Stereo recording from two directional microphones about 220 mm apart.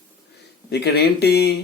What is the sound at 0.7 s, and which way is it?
Speech, 45° left (ahead or behind).